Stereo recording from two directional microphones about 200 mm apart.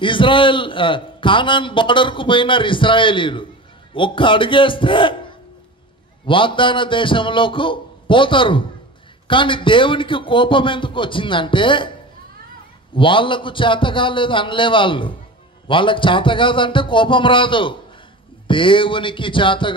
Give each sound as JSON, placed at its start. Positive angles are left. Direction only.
{"t": 0.0, "sound": "a man's voice", "side_deg": 25}
{"t": 6.2, "sound": "a man's voice", "side_deg": 25}
{"t": 12.9, "sound": "a man's voice", "side_deg": 25}